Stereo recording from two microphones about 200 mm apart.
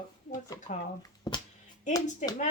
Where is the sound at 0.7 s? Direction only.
35° left (ahead or behind).